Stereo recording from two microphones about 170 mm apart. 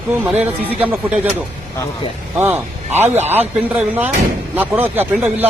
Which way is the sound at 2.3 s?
15° right (ahead or behind).